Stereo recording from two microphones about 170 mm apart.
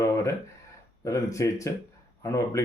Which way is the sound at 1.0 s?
20° left (ahead or behind).